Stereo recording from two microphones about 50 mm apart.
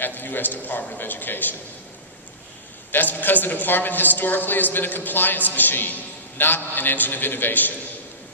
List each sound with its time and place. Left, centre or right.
0.0 s a man's voice: left
2.9 s a man's voice: left